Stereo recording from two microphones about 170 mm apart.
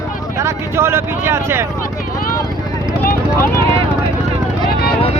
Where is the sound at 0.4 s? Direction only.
15° right (ahead or behind).